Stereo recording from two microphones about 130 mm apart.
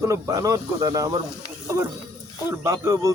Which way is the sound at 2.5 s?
20° right (ahead or behind).